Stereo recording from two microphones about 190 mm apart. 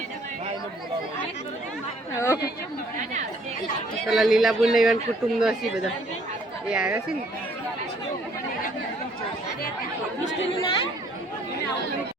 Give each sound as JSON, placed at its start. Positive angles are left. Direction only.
{"t": 2.1, "sound": "chatter", "side_deg": 15}
{"t": 4.0, "sound": "a man's voice", "side_deg": 0}
{"t": 10.6, "sound": "speech", "side_deg": 25}